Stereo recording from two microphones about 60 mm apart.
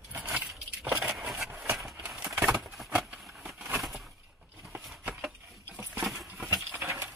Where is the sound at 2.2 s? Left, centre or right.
Right.